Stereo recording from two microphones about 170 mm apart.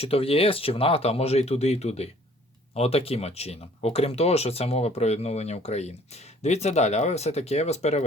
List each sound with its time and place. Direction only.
0.0 s speech: 35° left (ahead or behind)